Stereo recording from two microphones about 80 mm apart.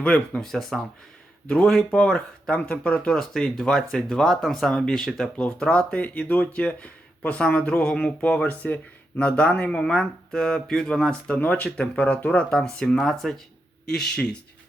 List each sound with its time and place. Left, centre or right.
0.0 s speech: centre
3.1 s speech: centre